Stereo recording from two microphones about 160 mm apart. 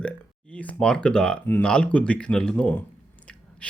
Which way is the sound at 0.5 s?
10° left (ahead or behind).